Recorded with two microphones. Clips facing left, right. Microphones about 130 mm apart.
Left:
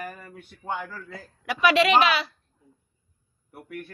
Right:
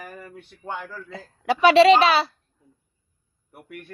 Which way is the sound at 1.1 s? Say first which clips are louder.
Right 11 dB; 25° right (ahead or behind).